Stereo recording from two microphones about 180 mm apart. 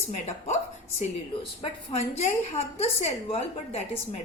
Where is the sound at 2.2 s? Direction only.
35° left (ahead or behind).